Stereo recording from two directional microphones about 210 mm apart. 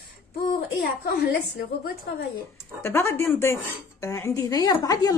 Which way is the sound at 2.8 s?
10° left (ahead or behind).